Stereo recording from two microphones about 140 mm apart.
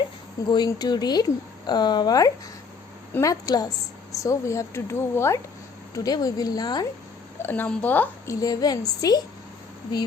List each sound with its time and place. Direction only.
0.4 s a woman's voice: 30° left (ahead or behind)
7.4 s speech: 15° left (ahead or behind)
8.4 s a woman's voice: 25° left (ahead or behind)